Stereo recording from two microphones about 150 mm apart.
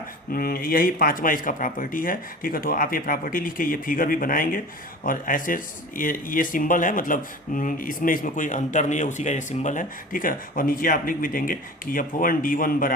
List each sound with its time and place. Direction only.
0.3 s speech: 80° left